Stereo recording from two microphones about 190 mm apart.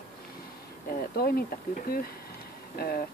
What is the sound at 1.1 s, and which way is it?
Speech, 55° left (ahead or behind).